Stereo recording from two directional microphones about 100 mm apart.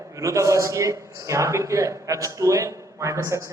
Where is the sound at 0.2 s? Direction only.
30° right (ahead or behind).